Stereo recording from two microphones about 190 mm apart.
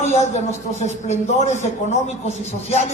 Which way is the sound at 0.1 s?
35° left (ahead or behind).